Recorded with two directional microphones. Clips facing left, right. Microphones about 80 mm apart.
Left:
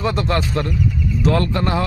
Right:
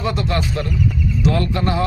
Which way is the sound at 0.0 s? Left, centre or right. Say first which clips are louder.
Left 1 dB; left.